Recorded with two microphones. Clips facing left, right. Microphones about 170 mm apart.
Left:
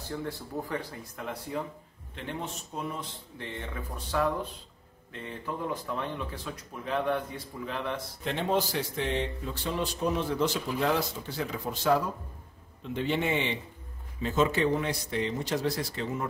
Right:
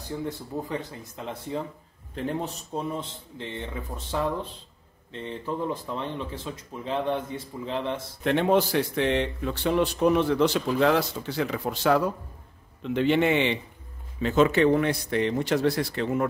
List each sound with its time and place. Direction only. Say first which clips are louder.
0.1 s speech: right 3 dB; 20° right (ahead or behind)
2.1 s speech: right 7 dB; 35° right (ahead or behind)
8.2 s speech: right 7 dB; 65° right (ahead or behind)